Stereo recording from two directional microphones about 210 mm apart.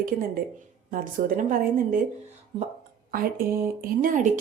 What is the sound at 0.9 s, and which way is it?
Speech, 40° right (ahead or behind).